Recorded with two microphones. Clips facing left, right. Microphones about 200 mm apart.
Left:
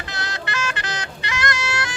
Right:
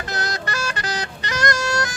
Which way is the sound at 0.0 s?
45° right (ahead or behind).